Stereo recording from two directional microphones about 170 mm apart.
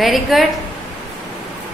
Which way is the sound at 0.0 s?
Centre (ahead or behind).